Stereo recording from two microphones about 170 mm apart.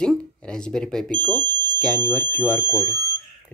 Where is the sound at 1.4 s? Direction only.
10° left (ahead or behind).